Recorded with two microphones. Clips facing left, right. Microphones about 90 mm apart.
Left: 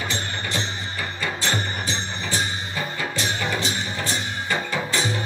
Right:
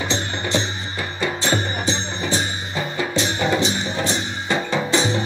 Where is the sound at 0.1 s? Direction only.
20° right (ahead or behind).